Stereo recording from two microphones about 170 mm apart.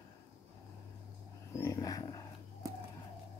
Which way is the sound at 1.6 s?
20° left (ahead or behind).